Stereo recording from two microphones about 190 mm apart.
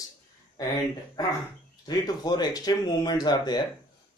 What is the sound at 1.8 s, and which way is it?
Speech, 20° left (ahead or behind).